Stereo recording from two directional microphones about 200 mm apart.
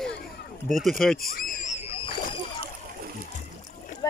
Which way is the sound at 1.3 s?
45° left (ahead or behind).